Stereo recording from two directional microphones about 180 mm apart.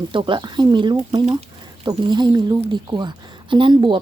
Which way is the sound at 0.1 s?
25° right (ahead or behind).